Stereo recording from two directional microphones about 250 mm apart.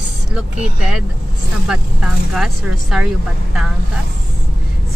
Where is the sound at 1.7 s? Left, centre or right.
Centre.